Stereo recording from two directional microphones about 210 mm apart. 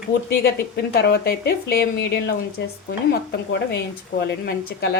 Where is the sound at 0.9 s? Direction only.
50° left (ahead or behind).